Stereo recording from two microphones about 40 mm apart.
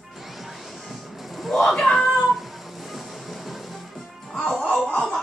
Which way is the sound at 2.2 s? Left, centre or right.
Centre.